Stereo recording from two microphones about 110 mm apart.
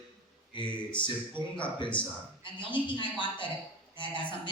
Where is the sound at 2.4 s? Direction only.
45° left (ahead or behind).